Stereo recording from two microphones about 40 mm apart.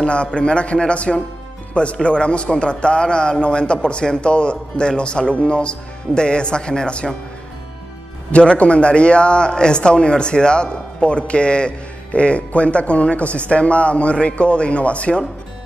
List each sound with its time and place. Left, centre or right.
0.0 s a man's voice: left
8.3 s a man's voice: left